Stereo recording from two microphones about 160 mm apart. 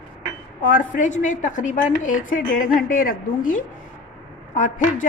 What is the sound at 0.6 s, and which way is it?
A woman's voice, 55° left (ahead or behind).